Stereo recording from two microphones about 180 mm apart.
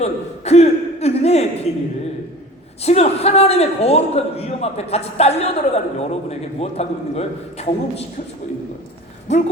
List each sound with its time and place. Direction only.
0.0 s a sound: 35° left (ahead or behind)
2.8 s a man's voice: 35° left (ahead or behind)
9.3 s a man's voice: 40° left (ahead or behind)